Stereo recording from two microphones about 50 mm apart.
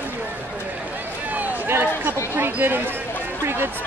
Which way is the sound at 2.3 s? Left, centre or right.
Right.